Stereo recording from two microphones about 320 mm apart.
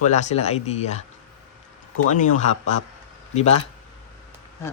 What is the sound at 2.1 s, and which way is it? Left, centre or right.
Speech, left.